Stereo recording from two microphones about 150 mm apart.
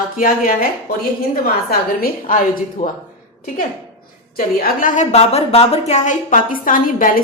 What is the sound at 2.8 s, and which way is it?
Speech, 55° left (ahead or behind).